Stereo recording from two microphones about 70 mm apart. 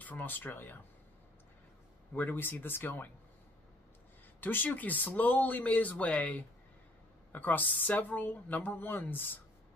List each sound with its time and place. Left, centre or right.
0.0 s speech: left
2.1 s speech: left
4.4 s speech: left